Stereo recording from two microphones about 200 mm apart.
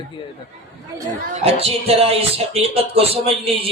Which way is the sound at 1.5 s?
30° right (ahead or behind).